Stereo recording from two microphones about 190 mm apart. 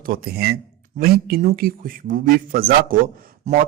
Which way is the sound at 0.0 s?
50° right (ahead or behind).